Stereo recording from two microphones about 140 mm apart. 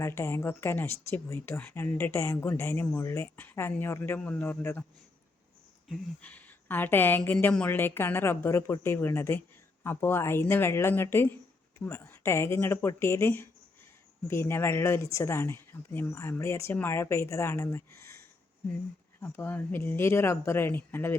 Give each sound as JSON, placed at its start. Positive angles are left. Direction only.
{"t": 0.0, "sound": "a woman's voice", "side_deg": 20}
{"t": 5.9, "sound": "a woman's voice", "side_deg": 10}
{"t": 19.2, "sound": "a woman's voice", "side_deg": 15}